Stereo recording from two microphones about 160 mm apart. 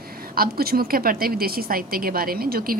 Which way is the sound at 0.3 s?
70° right (ahead or behind).